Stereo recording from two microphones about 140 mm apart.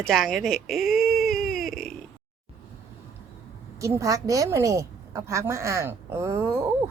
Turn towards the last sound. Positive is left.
turn(degrees=-20)  # may be behind; listen again after turning